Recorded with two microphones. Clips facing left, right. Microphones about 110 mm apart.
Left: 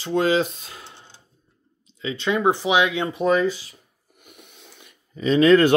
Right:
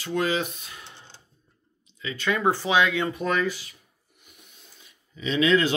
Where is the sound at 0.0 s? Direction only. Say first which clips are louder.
Left 6 dB; 30° left (ahead or behind).